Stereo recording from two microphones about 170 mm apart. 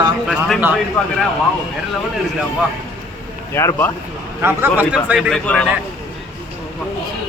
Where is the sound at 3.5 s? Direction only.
15° left (ahead or behind).